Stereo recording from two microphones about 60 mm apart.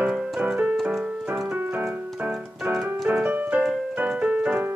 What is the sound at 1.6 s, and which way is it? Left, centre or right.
Keyboard, right.